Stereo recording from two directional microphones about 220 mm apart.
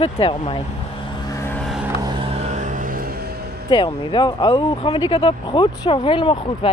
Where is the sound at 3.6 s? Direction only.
20° left (ahead or behind).